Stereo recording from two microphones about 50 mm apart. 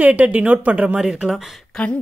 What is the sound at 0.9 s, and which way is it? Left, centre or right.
Speech, centre.